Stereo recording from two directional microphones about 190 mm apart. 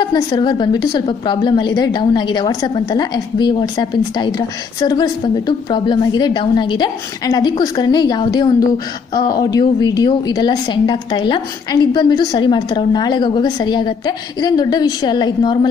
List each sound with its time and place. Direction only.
0.0 s a woman's voice: 25° left (ahead or behind)